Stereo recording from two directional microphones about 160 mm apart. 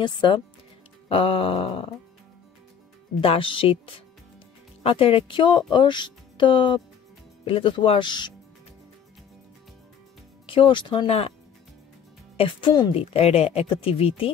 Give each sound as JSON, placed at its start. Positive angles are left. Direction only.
{"t": 0.0, "sound": "a woman's voice", "side_deg": 30}
{"t": 3.2, "sound": "speech", "side_deg": 35}
{"t": 10.4, "sound": "speech", "side_deg": 35}
{"t": 12.4, "sound": "a woman's voice", "side_deg": 30}
{"t": 13.0, "sound": "speech", "side_deg": 40}